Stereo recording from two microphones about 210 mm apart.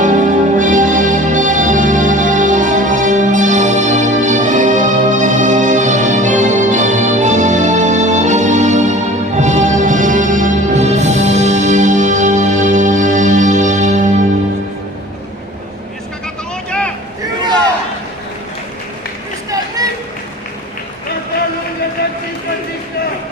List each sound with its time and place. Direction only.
0.0 s music: 35° right (ahead or behind)
16.6 s a sound: 5° left (ahead or behind)
19.5 s music: 15° right (ahead or behind)